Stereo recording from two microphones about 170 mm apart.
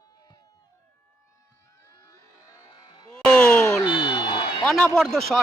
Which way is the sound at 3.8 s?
25° left (ahead or behind).